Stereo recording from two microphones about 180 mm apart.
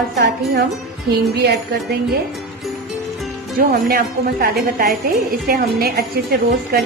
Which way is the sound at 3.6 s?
55° right (ahead or behind).